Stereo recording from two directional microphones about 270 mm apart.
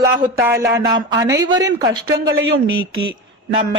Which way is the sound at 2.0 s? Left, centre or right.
Right.